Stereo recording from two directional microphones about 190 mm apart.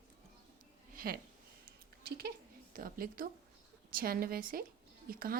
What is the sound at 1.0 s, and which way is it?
Speech, 45° right (ahead or behind).